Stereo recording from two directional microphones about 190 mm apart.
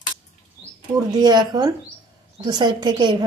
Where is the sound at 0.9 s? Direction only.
20° right (ahead or behind).